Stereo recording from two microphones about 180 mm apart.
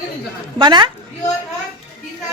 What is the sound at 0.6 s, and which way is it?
Speech, 25° right (ahead or behind).